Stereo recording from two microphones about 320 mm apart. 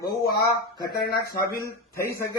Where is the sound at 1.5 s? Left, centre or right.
Centre.